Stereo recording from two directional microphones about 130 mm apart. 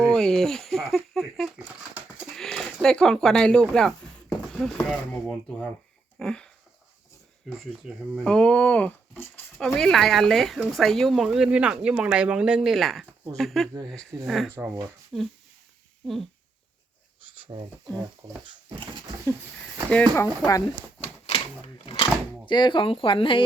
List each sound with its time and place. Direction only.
0.1 s speech: 5° left (ahead or behind)
7.6 s speech: 10° right (ahead or behind)
8.2 s speech: 5° left (ahead or behind)
9.7 s speech: 5° left (ahead or behind)
14.5 s speech: 20° right (ahead or behind)
15.1 s speech: 5° right (ahead or behind)
17.4 s speech: 35° right (ahead or behind)
19.9 s speech: 10° left (ahead or behind)
21.0 s typewriter: 50° left (ahead or behind)
22.4 s speech: 35° left (ahead or behind)